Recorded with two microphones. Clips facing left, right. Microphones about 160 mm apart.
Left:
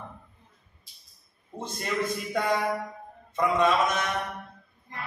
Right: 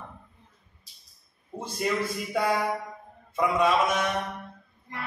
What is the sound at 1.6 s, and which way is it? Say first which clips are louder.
A man's voice: right 2 dB; 10° right (ahead or behind).